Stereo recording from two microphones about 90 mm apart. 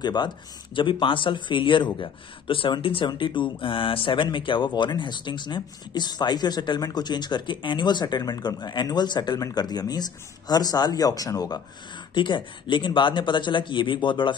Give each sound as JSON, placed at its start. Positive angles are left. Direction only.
{"t": 0.0, "sound": "speech", "side_deg": 55}
{"t": 3.1, "sound": "speech", "side_deg": 65}
{"t": 12.1, "sound": "speech", "side_deg": 65}